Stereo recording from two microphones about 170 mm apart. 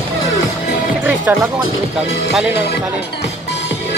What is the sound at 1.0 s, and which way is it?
Music, 10° right (ahead or behind).